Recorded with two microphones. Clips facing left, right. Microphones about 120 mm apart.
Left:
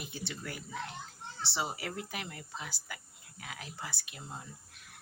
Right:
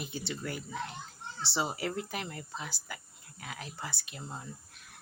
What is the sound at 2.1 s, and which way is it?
A woman's voice, 30° right (ahead or behind).